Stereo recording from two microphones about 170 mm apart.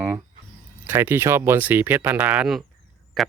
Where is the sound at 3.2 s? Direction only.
Centre (ahead or behind).